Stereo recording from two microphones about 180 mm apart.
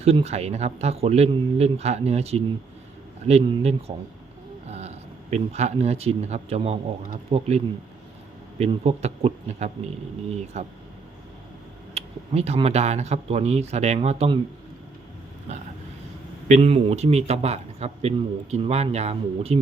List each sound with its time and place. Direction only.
0.0 s speech: 35° right (ahead or behind)
11.9 s speech: 35° right (ahead or behind)
16.5 s speech: 35° right (ahead or behind)